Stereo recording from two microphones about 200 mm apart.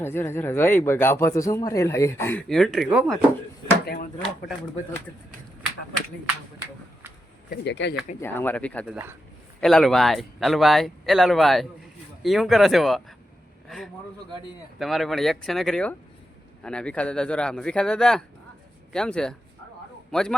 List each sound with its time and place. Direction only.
0.0 s speech: 10° left (ahead or behind)
2.5 s speech: centre (ahead or behind)
7.5 s speech: 60° left (ahead or behind)
8.2 s speech: 10° left (ahead or behind)